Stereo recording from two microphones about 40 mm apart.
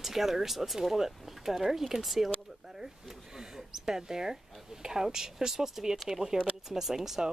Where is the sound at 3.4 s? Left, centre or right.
Centre.